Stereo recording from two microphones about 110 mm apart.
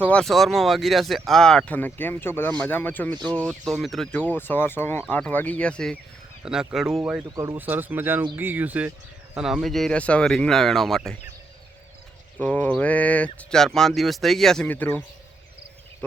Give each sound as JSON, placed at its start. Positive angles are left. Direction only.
{"t": 0.0, "sound": "speech", "side_deg": 10}
{"t": 0.3, "sound": "speech", "side_deg": 0}
{"t": 4.2, "sound": "speech", "side_deg": 15}
{"t": 6.4, "sound": "speech", "side_deg": -5}
{"t": 7.3, "sound": "speech", "side_deg": -30}
{"t": 7.5, "sound": "speech", "side_deg": -15}
{"t": 9.3, "sound": "speech", "side_deg": -5}
{"t": 12.4, "sound": "speech", "side_deg": 10}